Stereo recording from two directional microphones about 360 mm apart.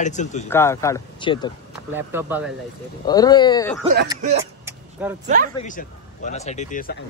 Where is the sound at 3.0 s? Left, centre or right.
Centre.